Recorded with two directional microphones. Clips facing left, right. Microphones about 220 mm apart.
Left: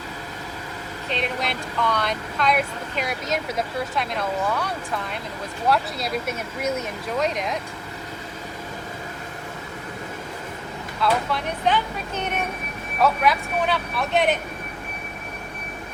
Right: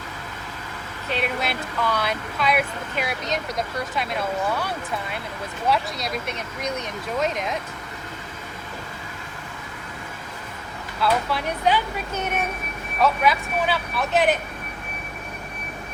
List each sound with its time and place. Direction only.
1.1 s speech: 5° right (ahead or behind)
11.0 s speech: 5° right (ahead or behind)